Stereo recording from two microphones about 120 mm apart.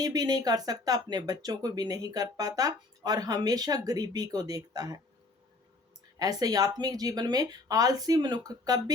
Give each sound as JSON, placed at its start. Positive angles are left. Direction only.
{"t": 0.0, "sound": "speech", "side_deg": -35}
{"t": 6.1, "sound": "speech", "side_deg": -30}